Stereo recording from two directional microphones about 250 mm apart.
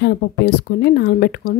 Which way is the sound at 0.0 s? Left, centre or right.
Left.